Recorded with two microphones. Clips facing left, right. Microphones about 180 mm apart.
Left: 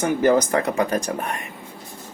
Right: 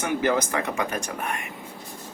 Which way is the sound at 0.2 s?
40° left (ahead or behind).